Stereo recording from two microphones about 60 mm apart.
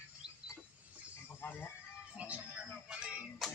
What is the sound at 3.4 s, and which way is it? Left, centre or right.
Music, centre.